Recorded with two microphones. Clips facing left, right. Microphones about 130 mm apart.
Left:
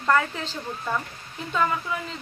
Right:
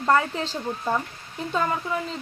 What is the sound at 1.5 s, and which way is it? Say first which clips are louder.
Speech: even; 35° right (ahead or behind).